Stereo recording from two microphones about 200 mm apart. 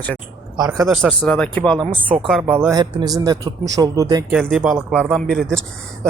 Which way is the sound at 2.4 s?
10° right (ahead or behind).